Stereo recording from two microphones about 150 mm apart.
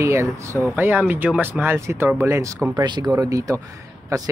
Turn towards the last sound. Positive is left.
turn(degrees=-20)  # may be behind; listen again after turning